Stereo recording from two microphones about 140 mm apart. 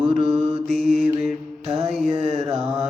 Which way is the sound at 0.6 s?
55° right (ahead or behind).